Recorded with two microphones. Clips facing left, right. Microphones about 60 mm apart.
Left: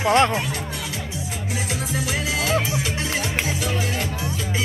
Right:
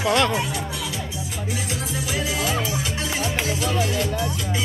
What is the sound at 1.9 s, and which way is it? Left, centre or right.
Music, left.